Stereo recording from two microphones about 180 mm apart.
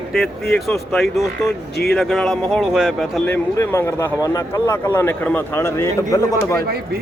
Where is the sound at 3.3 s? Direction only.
15° left (ahead or behind).